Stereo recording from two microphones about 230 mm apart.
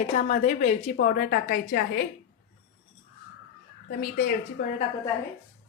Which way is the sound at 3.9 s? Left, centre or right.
Left.